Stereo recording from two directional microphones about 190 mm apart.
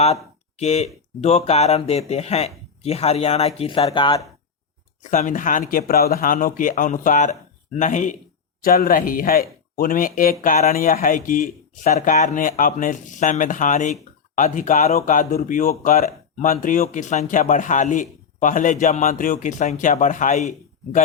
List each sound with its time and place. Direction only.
0.0 s a sound: 35° left (ahead or behind)
1.2 s speech: 35° left (ahead or behind)
5.1 s speech: 40° left (ahead or behind)